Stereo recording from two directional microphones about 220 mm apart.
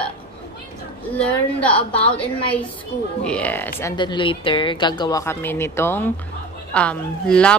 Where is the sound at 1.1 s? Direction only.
5° left (ahead or behind).